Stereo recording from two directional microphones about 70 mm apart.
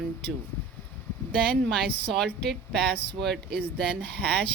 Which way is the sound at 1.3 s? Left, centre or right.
Centre.